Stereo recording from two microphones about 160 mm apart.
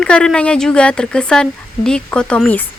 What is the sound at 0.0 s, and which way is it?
Speech, 5° left (ahead or behind).